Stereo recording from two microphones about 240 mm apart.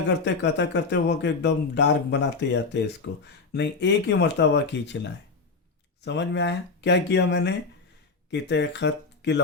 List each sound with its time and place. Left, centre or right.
0.5 s speech: left
6.1 s speech: left